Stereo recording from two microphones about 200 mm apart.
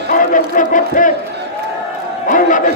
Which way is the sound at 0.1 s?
40° left (ahead or behind).